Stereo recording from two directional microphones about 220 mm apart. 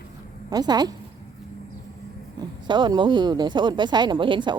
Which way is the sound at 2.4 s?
20° right (ahead or behind).